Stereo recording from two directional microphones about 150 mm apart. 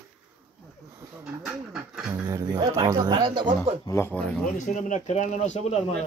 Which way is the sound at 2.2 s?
25° right (ahead or behind).